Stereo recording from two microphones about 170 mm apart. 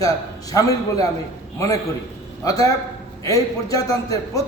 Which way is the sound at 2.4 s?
20° left (ahead or behind).